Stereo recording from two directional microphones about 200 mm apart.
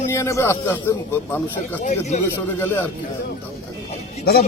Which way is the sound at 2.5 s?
10° left (ahead or behind).